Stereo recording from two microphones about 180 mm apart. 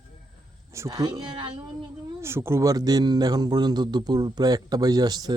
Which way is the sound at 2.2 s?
15° right (ahead or behind).